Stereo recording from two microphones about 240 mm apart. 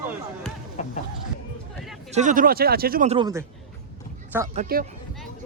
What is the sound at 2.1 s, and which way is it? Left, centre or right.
Speech, right.